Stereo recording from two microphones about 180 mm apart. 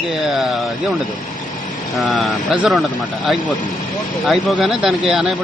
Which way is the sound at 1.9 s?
Centre (ahead or behind).